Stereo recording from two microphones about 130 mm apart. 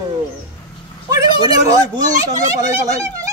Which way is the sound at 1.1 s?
30° right (ahead or behind).